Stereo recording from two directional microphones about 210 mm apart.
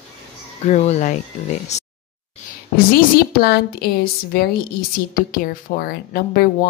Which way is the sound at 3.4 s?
50° left (ahead or behind).